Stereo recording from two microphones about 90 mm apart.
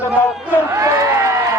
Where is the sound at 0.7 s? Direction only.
35° right (ahead or behind).